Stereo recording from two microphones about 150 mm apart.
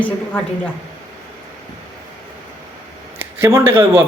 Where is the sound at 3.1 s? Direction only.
15° right (ahead or behind).